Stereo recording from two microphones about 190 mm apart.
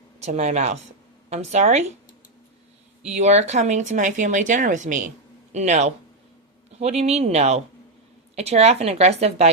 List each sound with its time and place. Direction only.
0.2 s speech: 35° right (ahead or behind)
3.1 s speech: 35° right (ahead or behind)